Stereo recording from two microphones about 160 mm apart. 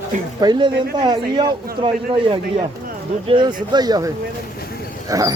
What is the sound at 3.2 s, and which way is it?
Speech, 30° right (ahead or behind).